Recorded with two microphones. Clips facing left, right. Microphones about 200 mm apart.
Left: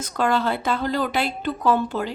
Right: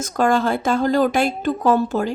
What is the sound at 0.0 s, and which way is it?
A woman's voice, 45° right (ahead or behind).